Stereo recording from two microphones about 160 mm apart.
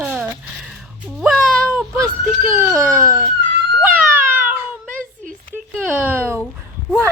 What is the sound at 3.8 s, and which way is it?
Cat, 10° right (ahead or behind).